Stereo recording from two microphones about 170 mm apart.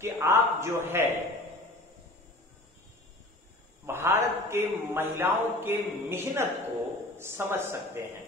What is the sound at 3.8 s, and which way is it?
Speech, 15° right (ahead or behind).